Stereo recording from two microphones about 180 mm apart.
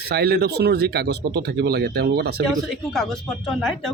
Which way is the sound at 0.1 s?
65° right (ahead or behind).